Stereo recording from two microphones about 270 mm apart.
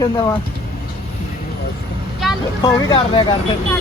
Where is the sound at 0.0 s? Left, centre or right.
Centre.